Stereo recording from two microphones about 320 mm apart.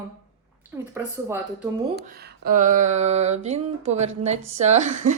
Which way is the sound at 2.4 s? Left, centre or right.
Right.